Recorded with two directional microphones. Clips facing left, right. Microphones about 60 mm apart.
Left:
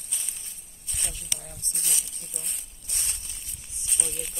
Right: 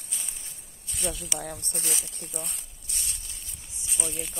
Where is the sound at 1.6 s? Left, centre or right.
Right.